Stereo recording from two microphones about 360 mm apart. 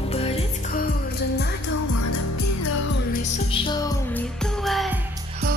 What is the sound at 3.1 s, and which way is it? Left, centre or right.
Music, centre.